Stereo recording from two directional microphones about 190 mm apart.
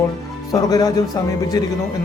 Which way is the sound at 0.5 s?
20° left (ahead or behind).